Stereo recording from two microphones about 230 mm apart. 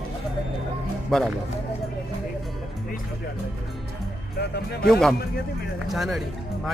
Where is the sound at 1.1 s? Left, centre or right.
Centre.